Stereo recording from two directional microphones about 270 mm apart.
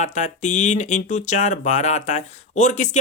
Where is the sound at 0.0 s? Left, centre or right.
Left.